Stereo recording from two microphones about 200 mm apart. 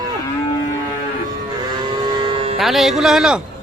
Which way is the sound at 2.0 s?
25° right (ahead or behind).